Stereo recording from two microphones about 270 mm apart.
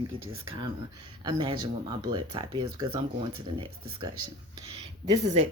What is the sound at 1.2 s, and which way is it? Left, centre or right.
Speech, centre.